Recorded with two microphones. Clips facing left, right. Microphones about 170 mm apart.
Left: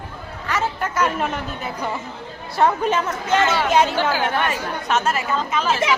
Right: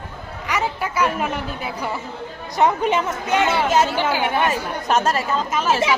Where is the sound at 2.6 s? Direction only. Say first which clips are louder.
Even; 15° right (ahead or behind).